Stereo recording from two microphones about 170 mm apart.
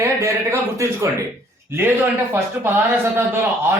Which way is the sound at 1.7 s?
15° right (ahead or behind).